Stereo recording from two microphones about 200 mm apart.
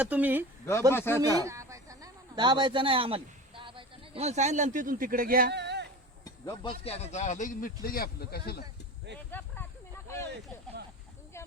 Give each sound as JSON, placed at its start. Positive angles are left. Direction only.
{"t": 0.0, "sound": "speech", "side_deg": -10}
{"t": 0.9, "sound": "speech", "side_deg": 10}
{"t": 1.2, "sound": "a sound", "side_deg": -15}
{"t": 6.2, "sound": "speech", "side_deg": 20}
{"t": 9.1, "sound": "speech", "side_deg": -60}
{"t": 11.3, "sound": "a sound", "side_deg": 15}